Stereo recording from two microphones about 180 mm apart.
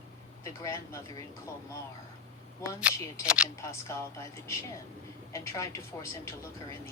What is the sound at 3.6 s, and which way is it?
Speech, 15° left (ahead or behind).